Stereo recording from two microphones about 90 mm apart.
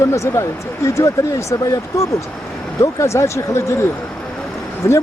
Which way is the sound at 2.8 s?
35° left (ahead or behind).